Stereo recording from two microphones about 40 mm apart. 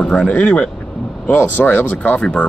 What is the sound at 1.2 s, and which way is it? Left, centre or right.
Speech, left.